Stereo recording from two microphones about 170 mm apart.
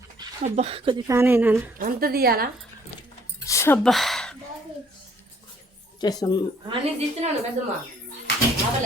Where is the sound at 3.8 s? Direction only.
Centre (ahead or behind).